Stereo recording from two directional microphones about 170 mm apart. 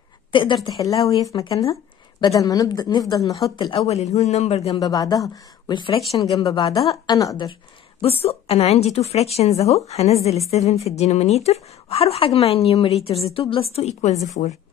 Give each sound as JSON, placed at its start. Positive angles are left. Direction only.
{"t": 0.3, "sound": "a woman's voice", "side_deg": 30}
{"t": 4.7, "sound": "speech", "side_deg": 25}
{"t": 8.0, "sound": "a woman's voice", "side_deg": 35}
{"t": 14.4, "sound": "a woman's voice", "side_deg": 55}